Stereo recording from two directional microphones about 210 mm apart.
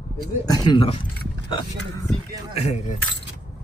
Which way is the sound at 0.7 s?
25° left (ahead or behind).